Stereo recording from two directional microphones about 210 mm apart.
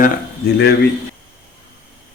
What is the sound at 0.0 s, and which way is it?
Speech, 45° left (ahead or behind).